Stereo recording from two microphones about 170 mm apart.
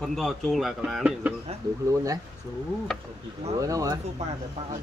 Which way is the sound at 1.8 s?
20° right (ahead or behind).